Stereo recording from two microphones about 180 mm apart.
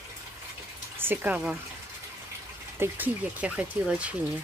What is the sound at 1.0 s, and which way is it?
Speech, 10° right (ahead or behind).